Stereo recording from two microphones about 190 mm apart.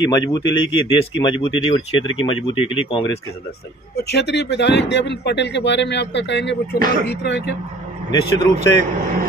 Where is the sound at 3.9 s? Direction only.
60° left (ahead or behind).